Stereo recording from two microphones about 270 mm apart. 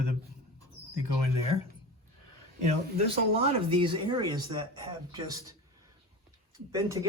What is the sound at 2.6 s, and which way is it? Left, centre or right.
Speech, right.